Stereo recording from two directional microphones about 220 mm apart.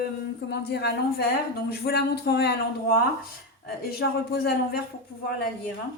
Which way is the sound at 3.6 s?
45° left (ahead or behind).